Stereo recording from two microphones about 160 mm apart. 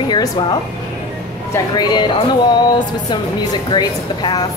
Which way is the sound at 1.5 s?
25° left (ahead or behind).